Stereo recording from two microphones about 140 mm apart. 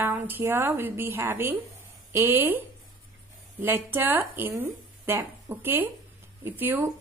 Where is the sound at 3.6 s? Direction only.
15° right (ahead or behind).